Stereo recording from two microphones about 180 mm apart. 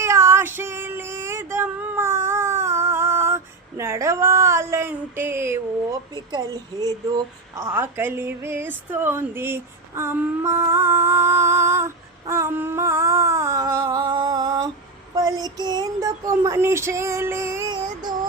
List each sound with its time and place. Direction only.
0.0 s female singing: 15° right (ahead or behind)
6.3 s a woman's voice: 20° right (ahead or behind)
12.2 s a sound: 15° right (ahead or behind)